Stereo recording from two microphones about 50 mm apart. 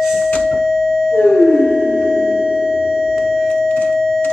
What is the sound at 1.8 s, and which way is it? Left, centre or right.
Music, centre.